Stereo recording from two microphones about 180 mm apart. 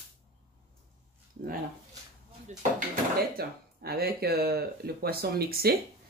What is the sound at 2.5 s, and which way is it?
Dishes, 50° right (ahead or behind).